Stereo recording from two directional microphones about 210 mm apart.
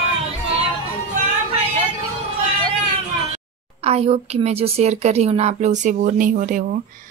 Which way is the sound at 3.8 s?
30° right (ahead or behind).